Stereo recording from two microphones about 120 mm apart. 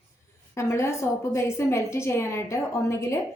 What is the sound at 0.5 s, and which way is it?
A woman's voice, 20° left (ahead or behind).